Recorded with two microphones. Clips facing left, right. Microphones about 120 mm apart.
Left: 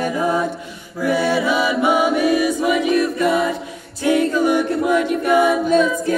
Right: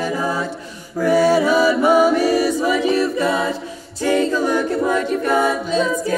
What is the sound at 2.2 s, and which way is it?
Choir, 35° right (ahead or behind).